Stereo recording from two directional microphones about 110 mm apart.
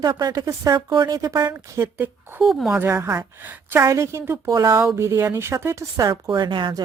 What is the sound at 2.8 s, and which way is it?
A woman's voice, 20° right (ahead or behind).